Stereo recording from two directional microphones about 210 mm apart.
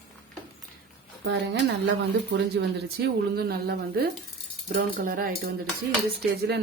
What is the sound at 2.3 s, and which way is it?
A woman's voice, 50° right (ahead or behind).